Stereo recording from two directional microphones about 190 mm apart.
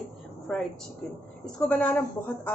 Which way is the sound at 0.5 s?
5° left (ahead or behind).